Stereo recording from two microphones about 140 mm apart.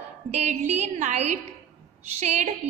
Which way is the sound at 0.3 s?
55° right (ahead or behind).